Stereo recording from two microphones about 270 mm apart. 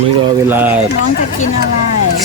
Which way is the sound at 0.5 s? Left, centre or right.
Centre.